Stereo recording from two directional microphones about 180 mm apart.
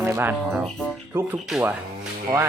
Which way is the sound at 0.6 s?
5° left (ahead or behind).